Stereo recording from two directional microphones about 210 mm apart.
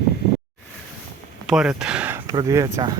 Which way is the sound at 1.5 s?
5° right (ahead or behind).